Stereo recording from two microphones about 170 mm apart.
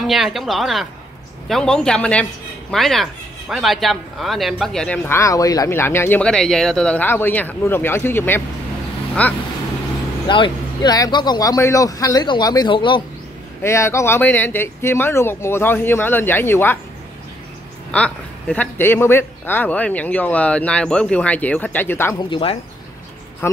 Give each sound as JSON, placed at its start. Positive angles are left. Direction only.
{"t": 0.0, "sound": "speech", "side_deg": 0}
{"t": 10.2, "sound": "speech", "side_deg": 30}
{"t": 13.6, "sound": "speech", "side_deg": 15}
{"t": 17.9, "sound": "speech", "side_deg": 5}
{"t": 22.3, "sound": "speech", "side_deg": 30}
{"t": 23.4, "sound": "a sound", "side_deg": 15}